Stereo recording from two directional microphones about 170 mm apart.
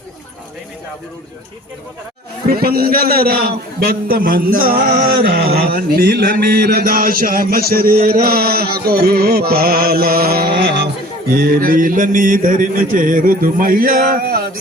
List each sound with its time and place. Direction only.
2.5 s a man's voice: 65° right (ahead or behind)